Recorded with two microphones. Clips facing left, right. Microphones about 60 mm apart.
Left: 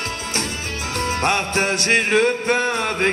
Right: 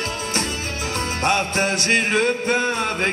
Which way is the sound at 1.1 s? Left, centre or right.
Left.